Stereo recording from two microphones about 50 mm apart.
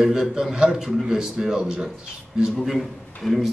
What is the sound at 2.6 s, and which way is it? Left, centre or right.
Speech, centre.